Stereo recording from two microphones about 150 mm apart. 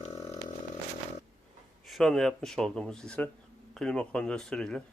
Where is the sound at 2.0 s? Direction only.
Centre (ahead or behind).